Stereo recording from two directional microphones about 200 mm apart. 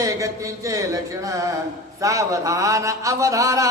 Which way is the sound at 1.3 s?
15° right (ahead or behind).